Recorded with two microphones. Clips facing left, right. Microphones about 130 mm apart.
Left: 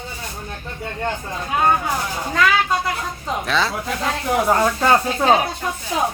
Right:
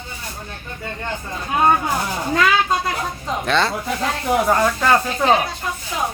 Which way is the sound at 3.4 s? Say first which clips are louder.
Right 3 dB; centre (ahead or behind).